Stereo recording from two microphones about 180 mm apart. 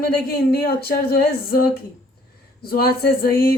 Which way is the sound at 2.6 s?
55° left (ahead or behind).